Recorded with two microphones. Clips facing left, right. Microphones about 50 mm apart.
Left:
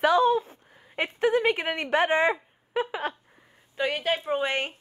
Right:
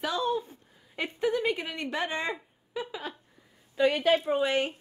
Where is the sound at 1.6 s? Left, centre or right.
Left.